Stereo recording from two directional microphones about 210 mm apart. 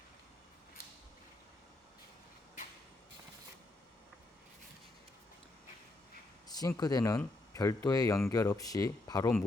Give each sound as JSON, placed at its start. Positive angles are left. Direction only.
{"t": 6.6, "sound": "speech", "side_deg": 15}